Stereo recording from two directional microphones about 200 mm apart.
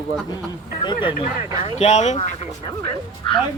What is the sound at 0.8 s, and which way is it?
Speech, 25° left (ahead or behind).